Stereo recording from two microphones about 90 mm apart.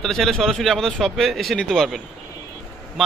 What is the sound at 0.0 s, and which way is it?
Speech, 5° left (ahead or behind).